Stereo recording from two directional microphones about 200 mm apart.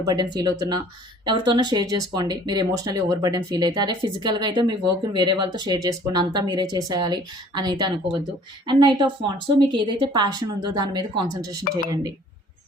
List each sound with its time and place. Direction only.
0.0 s speech: 20° right (ahead or behind)